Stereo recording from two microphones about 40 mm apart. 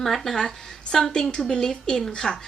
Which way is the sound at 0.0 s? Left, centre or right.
Centre.